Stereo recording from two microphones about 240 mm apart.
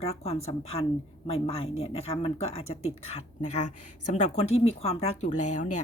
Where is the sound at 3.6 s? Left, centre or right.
Left.